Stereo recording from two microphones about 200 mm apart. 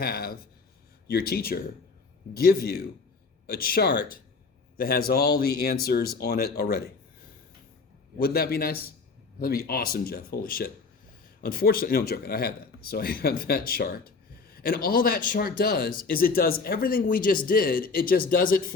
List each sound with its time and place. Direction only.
0.0 s speech: 50° left (ahead or behind)
8.2 s speech: 50° left (ahead or behind)